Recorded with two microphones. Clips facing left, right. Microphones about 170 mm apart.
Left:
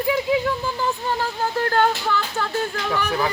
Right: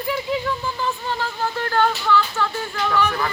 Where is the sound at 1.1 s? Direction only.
45° left (ahead or behind).